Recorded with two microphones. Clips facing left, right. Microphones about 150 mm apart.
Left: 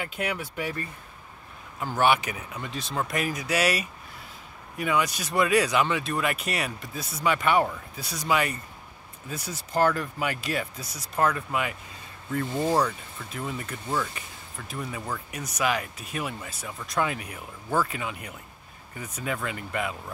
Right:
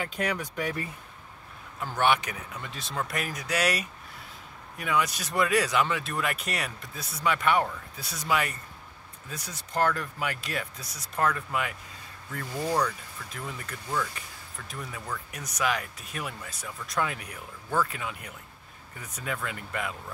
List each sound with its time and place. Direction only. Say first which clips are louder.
0.0 s speech: even; 5° left (ahead or behind)
1.8 s speech: left 2 dB; 5° left (ahead or behind)
12.4 s speech: left 3 dB; 25° left (ahead or behind)
13.5 s speech: left 6 dB; 5° left (ahead or behind)
13.8 s speech: left 2 dB; 25° left (ahead or behind)
14.7 s speech: left 4 dB; 5° left (ahead or behind)